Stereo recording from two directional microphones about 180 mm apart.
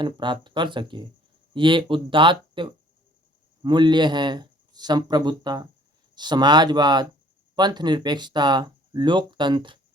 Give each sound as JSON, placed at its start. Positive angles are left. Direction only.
{"t": 0.0, "sound": "speech", "side_deg": -25}